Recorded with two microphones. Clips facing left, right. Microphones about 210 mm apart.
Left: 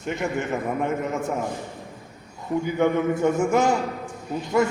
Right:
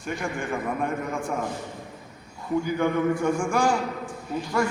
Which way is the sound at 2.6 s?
20° left (ahead or behind).